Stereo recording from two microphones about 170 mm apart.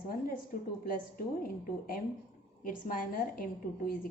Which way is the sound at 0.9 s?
55° left (ahead or behind).